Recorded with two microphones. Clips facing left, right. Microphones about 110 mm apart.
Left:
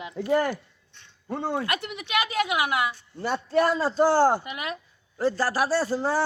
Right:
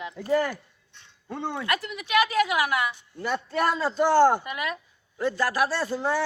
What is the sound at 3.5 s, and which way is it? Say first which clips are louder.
A woman's voice: left 4 dB; 35° left (ahead or behind).